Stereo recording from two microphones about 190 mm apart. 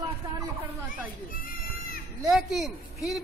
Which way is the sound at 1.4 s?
50° left (ahead or behind).